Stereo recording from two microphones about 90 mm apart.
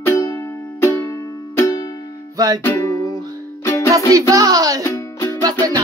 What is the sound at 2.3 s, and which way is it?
Music, 45° right (ahead or behind).